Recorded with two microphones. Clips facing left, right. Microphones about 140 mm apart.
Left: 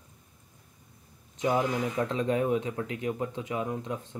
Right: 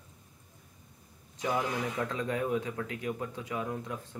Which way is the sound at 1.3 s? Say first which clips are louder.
Left 5 dB; 20° left (ahead or behind).